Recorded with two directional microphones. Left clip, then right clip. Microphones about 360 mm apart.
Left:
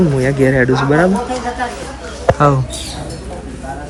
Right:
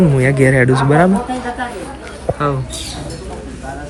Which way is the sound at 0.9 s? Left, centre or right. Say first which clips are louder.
Right 1 dB; right.